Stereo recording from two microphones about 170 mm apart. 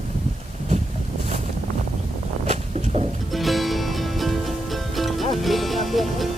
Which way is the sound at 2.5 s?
35° right (ahead or behind).